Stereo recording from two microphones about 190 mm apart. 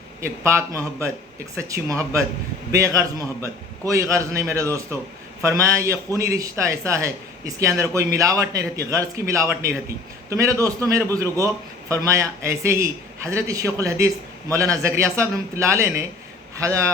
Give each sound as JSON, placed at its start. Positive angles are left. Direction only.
{"t": 0.2, "sound": "a man's voice", "side_deg": -15}